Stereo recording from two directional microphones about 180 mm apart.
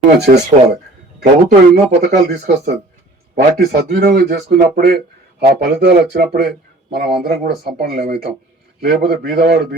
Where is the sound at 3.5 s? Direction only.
60° right (ahead or behind).